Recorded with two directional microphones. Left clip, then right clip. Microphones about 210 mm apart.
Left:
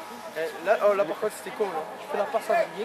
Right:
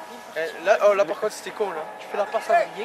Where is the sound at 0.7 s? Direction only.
20° right (ahead or behind).